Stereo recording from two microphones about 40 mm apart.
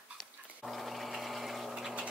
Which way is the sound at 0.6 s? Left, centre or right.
Centre.